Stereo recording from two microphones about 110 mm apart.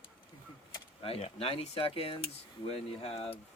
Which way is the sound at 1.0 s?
60° left (ahead or behind).